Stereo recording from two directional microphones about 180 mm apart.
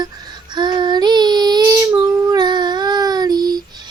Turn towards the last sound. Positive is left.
turn(degrees=-20)  # may be behind; listen again after turning